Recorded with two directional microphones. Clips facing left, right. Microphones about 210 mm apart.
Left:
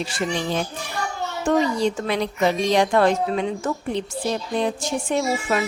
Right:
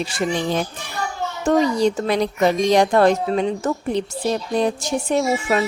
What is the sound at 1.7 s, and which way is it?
A woman's voice, 40° right (ahead or behind).